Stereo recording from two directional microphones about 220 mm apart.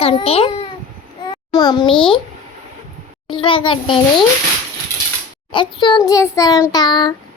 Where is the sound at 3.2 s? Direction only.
25° left (ahead or behind).